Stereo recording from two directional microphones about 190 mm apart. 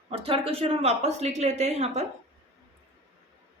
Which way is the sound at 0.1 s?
30° right (ahead or behind).